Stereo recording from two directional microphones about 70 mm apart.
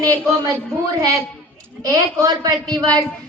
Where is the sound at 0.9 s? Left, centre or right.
Right.